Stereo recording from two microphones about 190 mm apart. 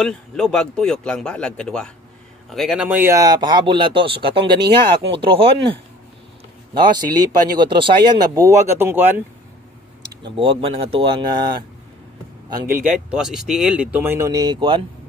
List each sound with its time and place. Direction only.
0.0 s a man's voice: 5° left (ahead or behind)
10.2 s speech: 25° right (ahead or behind)
12.7 s a man's voice: 5° right (ahead or behind); by 14.9 s 25° right (ahead or behind)